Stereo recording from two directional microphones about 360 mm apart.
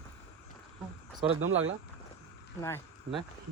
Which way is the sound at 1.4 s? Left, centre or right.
Right.